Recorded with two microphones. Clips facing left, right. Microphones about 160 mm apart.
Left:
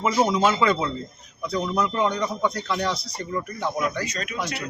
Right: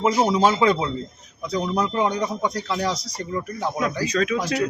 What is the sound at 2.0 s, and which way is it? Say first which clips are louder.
Speech: right 1 dB; 15° right (ahead or behind).